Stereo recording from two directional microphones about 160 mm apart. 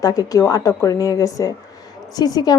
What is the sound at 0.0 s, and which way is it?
A woman's voice, 25° left (ahead or behind).